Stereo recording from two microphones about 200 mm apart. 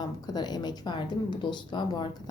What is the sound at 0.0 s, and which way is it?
A woman's voice, 20° left (ahead or behind).